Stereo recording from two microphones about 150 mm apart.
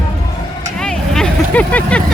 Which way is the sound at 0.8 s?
5° left (ahead or behind).